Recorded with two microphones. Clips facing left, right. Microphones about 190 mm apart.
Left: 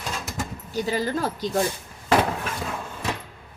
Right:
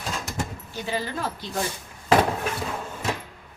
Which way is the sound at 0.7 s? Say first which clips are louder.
Left 8 dB; 40° left (ahead or behind).